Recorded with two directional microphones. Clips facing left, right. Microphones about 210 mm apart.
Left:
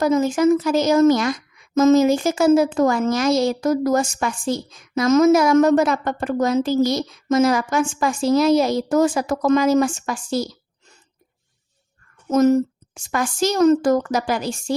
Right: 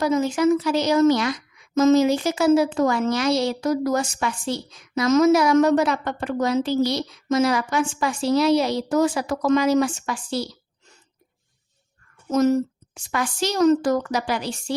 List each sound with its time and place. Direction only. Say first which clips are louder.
0.0 s a woman's voice: left 3 dB; 45° left (ahead or behind)
12.3 s a woman's voice: left 3 dB; 50° left (ahead or behind)